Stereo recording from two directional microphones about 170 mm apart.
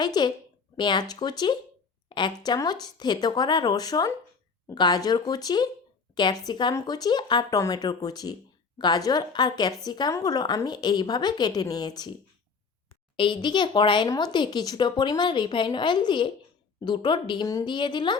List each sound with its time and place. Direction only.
0.0 s a woman's voice: 25° left (ahead or behind)
13.1 s a woman's voice: 30° left (ahead or behind)